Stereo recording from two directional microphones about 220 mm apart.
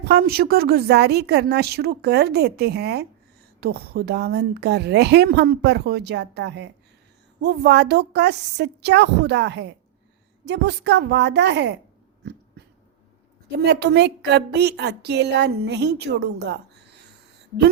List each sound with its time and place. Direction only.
0.0 s a woman's voice: 45° right (ahead or behind)
12.2 s dog: 50° right (ahead or behind)
13.6 s a woman's voice: 50° right (ahead or behind)